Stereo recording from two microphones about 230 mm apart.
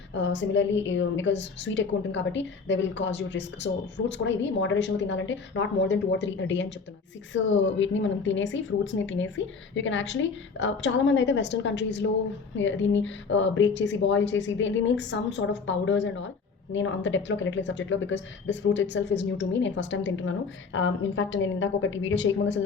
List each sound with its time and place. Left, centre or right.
0.1 s a woman's voice: left